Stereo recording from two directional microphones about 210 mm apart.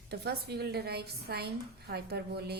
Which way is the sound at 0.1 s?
50° right (ahead or behind).